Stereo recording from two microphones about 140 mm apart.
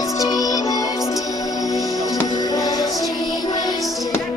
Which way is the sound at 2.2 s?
25° left (ahead or behind).